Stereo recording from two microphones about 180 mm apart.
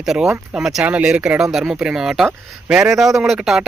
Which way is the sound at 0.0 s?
5° right (ahead or behind).